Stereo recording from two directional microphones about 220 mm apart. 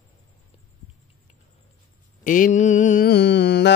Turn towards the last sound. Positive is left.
turn(degrees=50)  # may be behind; listen again after turning